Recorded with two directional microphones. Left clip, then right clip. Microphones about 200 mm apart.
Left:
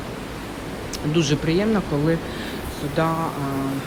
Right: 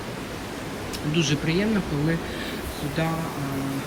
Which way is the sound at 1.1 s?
15° left (ahead or behind).